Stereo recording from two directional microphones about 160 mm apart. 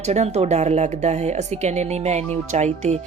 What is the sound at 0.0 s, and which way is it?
Speech, 40° right (ahead or behind).